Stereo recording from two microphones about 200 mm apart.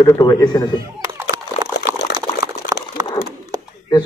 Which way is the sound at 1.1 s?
15° right (ahead or behind).